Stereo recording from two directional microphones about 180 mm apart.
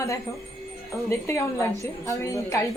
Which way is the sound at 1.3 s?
15° left (ahead or behind).